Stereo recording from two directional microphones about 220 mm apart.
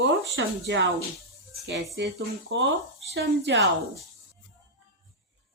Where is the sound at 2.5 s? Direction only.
55° right (ahead or behind).